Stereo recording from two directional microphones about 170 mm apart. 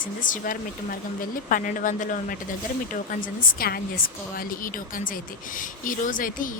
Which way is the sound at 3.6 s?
60° left (ahead or behind).